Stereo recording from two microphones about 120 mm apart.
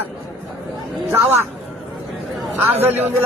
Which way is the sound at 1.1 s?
20° right (ahead or behind).